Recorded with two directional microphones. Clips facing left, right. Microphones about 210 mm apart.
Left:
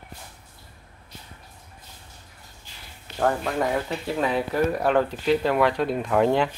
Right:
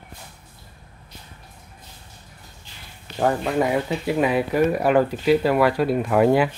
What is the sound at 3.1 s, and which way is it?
Speech, 10° right (ahead or behind).